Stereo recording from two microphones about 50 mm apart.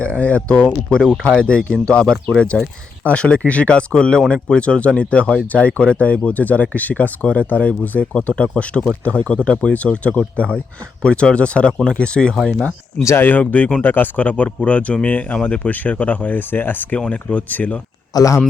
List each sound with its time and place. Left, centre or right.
0.2 s speech: left
2.5 s speech: centre
3.1 s speech: left
12.3 s speech: centre
13.2 s speech: left
13.8 s speech: left
16.5 s speech: left
17.1 s speech: left